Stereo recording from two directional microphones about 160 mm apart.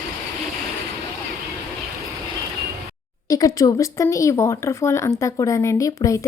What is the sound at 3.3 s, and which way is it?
Speech, 20° left (ahead or behind).